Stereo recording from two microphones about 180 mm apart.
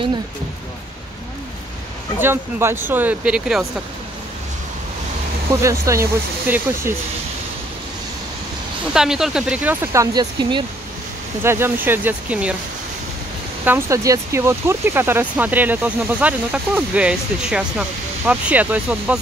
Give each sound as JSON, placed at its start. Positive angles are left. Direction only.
{"t": 2.1, "sound": "speech", "side_deg": -15}
{"t": 5.5, "sound": "speech", "side_deg": -15}
{"t": 8.9, "sound": "speech", "side_deg": -5}
{"t": 10.4, "sound": "speech", "side_deg": -25}
{"t": 11.4, "sound": "speech", "side_deg": -15}
{"t": 13.7, "sound": "speech", "side_deg": -15}